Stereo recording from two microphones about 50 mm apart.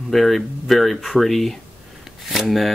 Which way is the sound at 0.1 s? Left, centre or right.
Centre.